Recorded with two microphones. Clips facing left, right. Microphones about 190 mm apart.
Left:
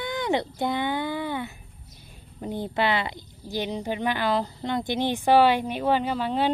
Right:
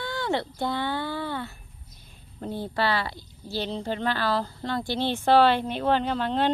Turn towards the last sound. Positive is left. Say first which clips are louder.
# even
turn(degrees=10)  # may be behind; listen again after turning